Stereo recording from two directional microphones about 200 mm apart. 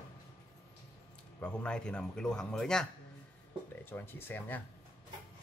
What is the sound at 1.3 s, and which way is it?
Speech, 5° left (ahead or behind).